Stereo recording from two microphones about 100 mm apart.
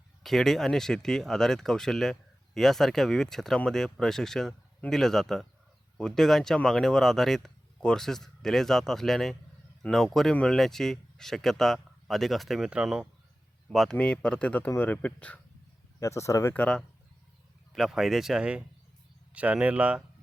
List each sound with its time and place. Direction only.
0.2 s speech: 5° left (ahead or behind)
13.9 s speech: 10° left (ahead or behind)
16.0 s speech: 30° left (ahead or behind)
16.6 s speech: 10° left (ahead or behind)
17.7 s speech: centre (ahead or behind)